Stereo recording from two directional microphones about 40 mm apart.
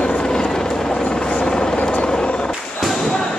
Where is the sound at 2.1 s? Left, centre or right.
Left.